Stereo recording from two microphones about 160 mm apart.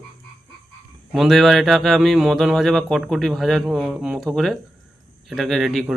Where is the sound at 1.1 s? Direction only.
Centre (ahead or behind).